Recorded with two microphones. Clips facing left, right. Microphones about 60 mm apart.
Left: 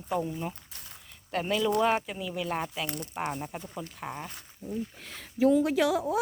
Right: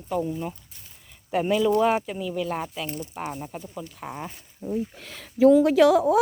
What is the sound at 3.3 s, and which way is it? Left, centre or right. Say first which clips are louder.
Speech: right 2 dB; centre.